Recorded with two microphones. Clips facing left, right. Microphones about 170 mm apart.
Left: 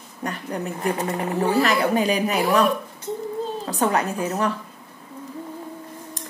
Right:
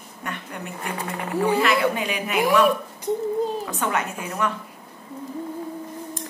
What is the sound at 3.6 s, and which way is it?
Speech, 35° left (ahead or behind).